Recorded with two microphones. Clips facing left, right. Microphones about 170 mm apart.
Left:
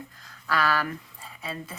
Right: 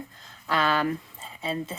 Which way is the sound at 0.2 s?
25° right (ahead or behind).